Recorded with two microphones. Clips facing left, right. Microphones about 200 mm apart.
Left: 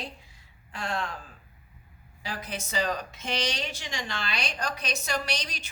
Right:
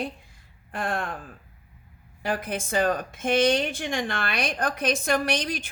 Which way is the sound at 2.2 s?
50° right (ahead or behind).